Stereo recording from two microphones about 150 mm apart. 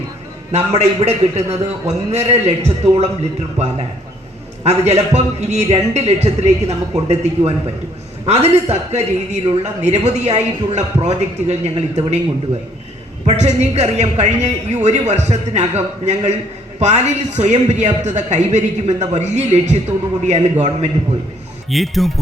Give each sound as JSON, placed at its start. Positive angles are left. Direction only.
{"t": 0.5, "sound": "a woman's voice", "side_deg": -45}
{"t": 13.2, "sound": "a woman's voice", "side_deg": -45}
{"t": 21.7, "sound": "speech", "side_deg": 0}